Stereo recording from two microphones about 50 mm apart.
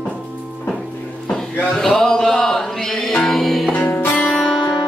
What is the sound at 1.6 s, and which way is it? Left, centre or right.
Music, centre.